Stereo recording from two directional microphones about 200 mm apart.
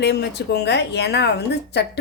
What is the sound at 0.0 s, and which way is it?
Speech, 55° left (ahead or behind).